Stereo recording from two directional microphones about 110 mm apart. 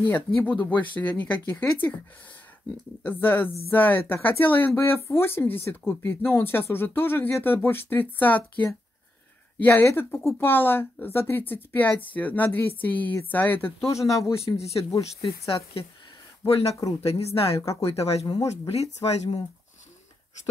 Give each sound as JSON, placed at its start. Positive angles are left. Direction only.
{"t": 0.0, "sound": "speech", "side_deg": 15}
{"t": 3.0, "sound": "speech", "side_deg": 20}
{"t": 13.7, "sound": "speech", "side_deg": 25}
{"t": 14.4, "sound": "speech", "side_deg": 65}
{"t": 16.4, "sound": "speech", "side_deg": 60}